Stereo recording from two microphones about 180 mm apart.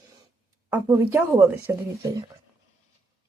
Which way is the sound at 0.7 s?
10° right (ahead or behind).